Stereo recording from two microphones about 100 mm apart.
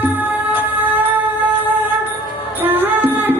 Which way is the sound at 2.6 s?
20° right (ahead or behind).